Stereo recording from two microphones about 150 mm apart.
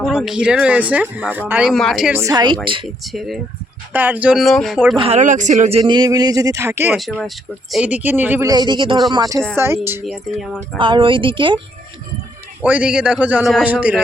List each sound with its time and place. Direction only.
0.0 s speech: 5° right (ahead or behind)
2.1 s speech: 25° right (ahead or behind)
3.1 s speech: centre (ahead or behind)
3.9 s speech: 10° right (ahead or behind)
4.9 s a woman's voice: 40° right (ahead or behind)
5.2 s speech: 55° right (ahead or behind)
5.8 s speech: 30° right (ahead or behind)
6.9 s a man's voice: centre (ahead or behind)
8.4 s a man's voice: 30° right (ahead or behind)
10.1 s speech: centre (ahead or behind)
10.8 s a woman's voice: 35° right (ahead or behind)
12.6 s a man's voice: 10° right (ahead or behind)